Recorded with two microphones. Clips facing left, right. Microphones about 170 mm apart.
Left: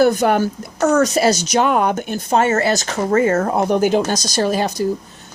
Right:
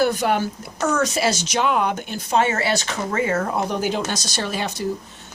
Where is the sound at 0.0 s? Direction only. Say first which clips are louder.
Left 5 dB; 45° left (ahead or behind).